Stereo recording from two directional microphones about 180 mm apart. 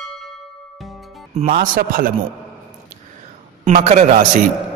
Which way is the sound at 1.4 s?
50° right (ahead or behind).